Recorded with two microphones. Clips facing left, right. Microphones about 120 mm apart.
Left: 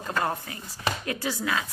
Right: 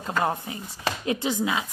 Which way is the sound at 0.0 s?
20° right (ahead or behind).